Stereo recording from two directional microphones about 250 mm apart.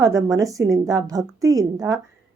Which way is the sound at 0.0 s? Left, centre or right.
Centre.